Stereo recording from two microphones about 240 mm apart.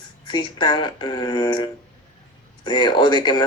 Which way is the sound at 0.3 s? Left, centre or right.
Centre.